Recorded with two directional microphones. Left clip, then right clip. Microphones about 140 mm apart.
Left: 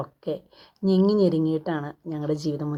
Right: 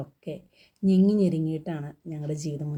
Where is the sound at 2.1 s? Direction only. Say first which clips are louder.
Left 7 dB; 45° left (ahead or behind).